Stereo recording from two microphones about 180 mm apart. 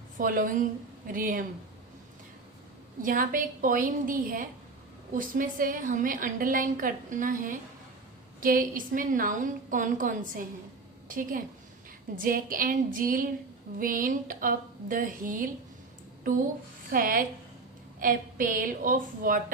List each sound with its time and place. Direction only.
0.2 s a woman's voice: 50° right (ahead or behind)
3.0 s a woman's voice: 50° right (ahead or behind)
16.9 s a woman's voice: 50° right (ahead or behind)